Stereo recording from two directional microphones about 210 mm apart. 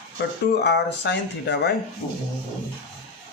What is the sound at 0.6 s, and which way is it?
Speech, 55° left (ahead or behind).